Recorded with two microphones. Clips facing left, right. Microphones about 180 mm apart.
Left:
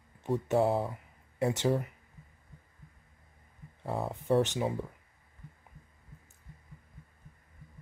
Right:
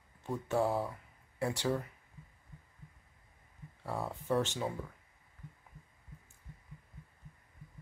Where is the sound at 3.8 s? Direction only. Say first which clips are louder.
Left 5 dB; 20° left (ahead or behind).